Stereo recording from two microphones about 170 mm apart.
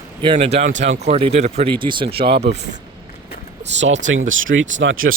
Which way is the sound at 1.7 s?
30° right (ahead or behind).